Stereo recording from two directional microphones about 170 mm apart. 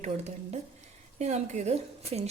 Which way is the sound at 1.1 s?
40° right (ahead or behind).